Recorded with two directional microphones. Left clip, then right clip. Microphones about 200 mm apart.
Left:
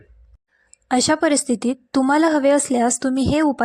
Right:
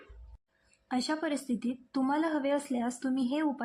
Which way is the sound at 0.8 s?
40° left (ahead or behind).